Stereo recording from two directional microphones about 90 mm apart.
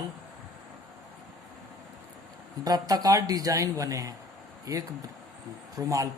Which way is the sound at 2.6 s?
45° right (ahead or behind).